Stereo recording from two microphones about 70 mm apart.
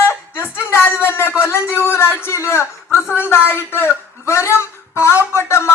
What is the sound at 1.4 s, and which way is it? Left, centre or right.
Speech, left.